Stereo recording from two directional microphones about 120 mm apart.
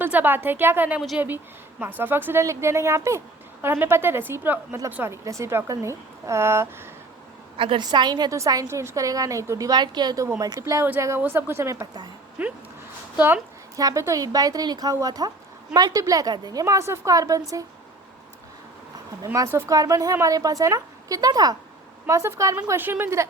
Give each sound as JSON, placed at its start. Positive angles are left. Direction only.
{"t": 0.0, "sound": "a woman's voice", "side_deg": -15}
{"t": 7.5, "sound": "a woman's voice", "side_deg": -45}
{"t": 12.4, "sound": "a woman's voice", "side_deg": -10}
{"t": 13.7, "sound": "a woman's voice", "side_deg": -30}
{"t": 19.2, "sound": "a woman's voice", "side_deg": -25}